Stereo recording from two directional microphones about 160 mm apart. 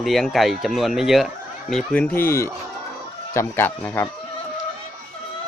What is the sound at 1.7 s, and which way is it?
A man's voice, 10° left (ahead or behind).